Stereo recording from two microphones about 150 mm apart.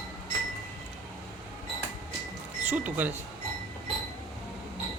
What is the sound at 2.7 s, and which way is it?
Speech, 10° right (ahead or behind).